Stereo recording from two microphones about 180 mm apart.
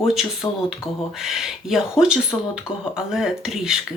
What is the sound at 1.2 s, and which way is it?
Speech, centre (ahead or behind).